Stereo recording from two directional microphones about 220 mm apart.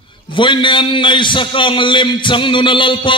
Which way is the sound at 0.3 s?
20° left (ahead or behind).